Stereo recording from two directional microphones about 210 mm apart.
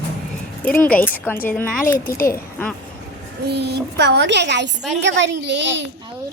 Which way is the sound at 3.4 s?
50° right (ahead or behind).